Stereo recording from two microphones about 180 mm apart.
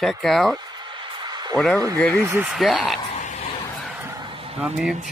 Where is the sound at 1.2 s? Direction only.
25° right (ahead or behind).